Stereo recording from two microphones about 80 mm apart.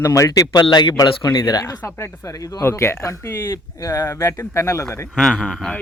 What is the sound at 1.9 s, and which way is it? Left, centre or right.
Speech, left.